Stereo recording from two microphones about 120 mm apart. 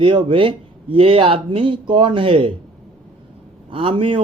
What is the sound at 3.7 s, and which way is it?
Speech, 50° right (ahead or behind).